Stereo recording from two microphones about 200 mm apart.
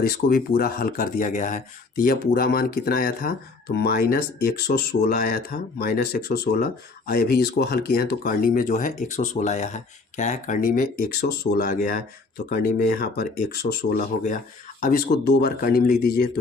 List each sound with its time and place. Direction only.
0.3 s speech: 50° left (ahead or behind)
14.8 s speech: 45° left (ahead or behind)